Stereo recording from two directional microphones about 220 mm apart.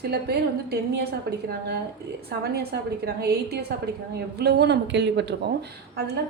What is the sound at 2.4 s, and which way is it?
A woman's voice, 50° right (ahead or behind).